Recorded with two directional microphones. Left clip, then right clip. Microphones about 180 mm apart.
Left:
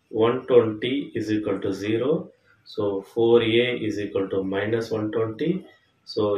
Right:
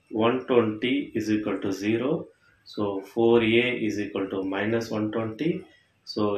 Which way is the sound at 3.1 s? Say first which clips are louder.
Left 2 dB; 35° right (ahead or behind).